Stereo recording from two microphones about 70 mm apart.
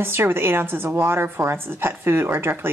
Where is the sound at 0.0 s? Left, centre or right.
Right.